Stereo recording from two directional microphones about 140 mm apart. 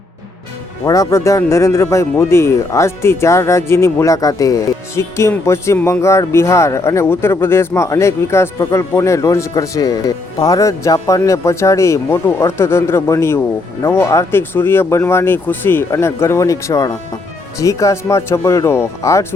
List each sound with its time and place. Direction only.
0.9 s speech: 25° left (ahead or behind)